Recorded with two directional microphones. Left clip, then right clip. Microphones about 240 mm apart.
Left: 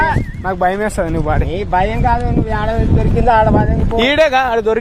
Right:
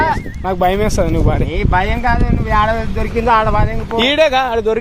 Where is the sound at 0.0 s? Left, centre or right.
Centre.